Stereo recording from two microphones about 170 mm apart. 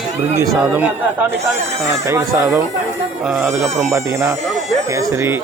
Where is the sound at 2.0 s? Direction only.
15° right (ahead or behind).